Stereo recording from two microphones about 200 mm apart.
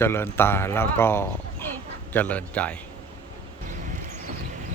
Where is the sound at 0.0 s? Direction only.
10° left (ahead or behind).